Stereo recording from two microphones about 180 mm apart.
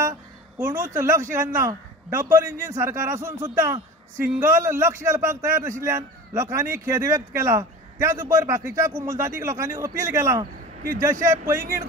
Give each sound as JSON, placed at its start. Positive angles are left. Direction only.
{"t": 0.0, "sound": "speech", "side_deg": -15}